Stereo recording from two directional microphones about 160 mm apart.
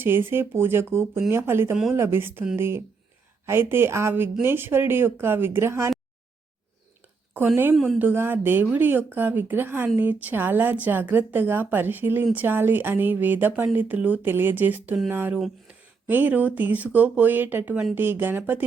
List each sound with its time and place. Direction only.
0.0 s speech: 15° right (ahead or behind)
1.7 s speech: centre (ahead or behind)
2.0 s speech: 15° right (ahead or behind)
7.3 s speech: 15° right (ahead or behind)
15.4 s speech: centre (ahead or behind)
16.0 s speech: 10° right (ahead or behind)